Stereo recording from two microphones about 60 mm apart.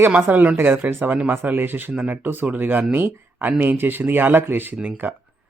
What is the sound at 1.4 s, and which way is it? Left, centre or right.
A man's voice, right.